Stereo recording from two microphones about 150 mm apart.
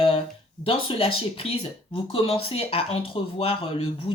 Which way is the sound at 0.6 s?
35° left (ahead or behind).